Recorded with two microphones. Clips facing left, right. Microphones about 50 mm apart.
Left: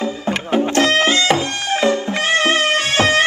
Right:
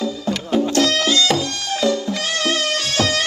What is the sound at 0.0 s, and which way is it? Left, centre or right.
Music, left.